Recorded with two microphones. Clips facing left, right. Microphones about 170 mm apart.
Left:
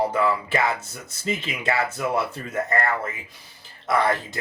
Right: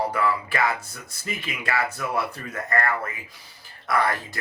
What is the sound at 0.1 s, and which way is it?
Speech, 25° left (ahead or behind).